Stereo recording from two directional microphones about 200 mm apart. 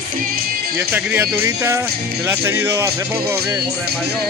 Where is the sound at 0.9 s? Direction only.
5° right (ahead or behind).